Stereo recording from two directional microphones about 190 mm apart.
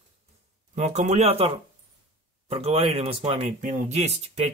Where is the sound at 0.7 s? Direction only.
35° right (ahead or behind).